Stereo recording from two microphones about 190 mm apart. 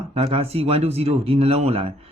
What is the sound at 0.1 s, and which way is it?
A man's voice, 30° right (ahead or behind).